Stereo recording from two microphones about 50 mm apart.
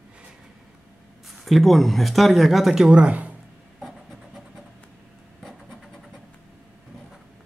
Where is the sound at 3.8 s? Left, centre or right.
Centre.